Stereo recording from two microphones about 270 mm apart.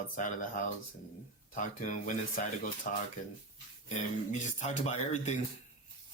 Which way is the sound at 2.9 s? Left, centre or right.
Left.